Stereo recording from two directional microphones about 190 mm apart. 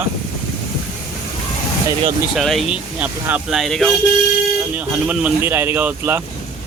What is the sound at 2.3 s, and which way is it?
Speech, centre (ahead or behind).